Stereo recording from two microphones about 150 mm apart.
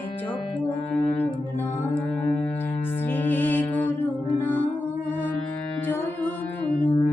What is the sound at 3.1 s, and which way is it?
Music, 15° left (ahead or behind).